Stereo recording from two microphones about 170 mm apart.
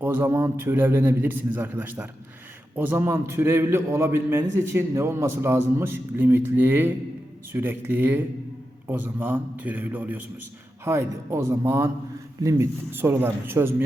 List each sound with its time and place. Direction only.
0.0 s a man's voice: 15° right (ahead or behind)